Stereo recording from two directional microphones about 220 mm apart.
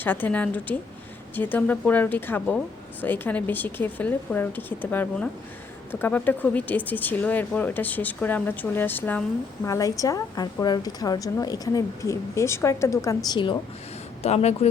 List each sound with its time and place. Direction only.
0.0 s a woman's voice: 10° left (ahead or behind); by 14.7 s 30° left (ahead or behind)